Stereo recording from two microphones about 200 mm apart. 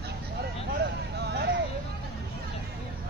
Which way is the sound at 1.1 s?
55° right (ahead or behind).